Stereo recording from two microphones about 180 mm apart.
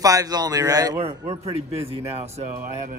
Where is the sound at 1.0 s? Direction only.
35° right (ahead or behind).